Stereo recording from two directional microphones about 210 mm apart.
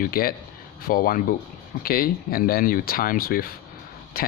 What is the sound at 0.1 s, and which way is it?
Speech, 45° left (ahead or behind).